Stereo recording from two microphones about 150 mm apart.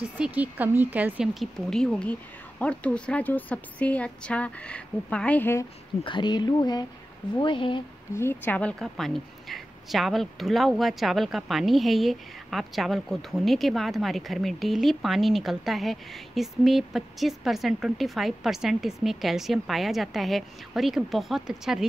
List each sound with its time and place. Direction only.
0.2 s a woman's voice: 10° right (ahead or behind); by 5.7 s 15° left (ahead or behind)
6.0 s speech: 30° left (ahead or behind)
8.1 s a woman's voice: 15° left (ahead or behind); by 21.8 s 5° right (ahead or behind)